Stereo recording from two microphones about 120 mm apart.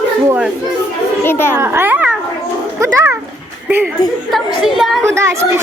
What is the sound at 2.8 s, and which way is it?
Speech, 25° right (ahead or behind).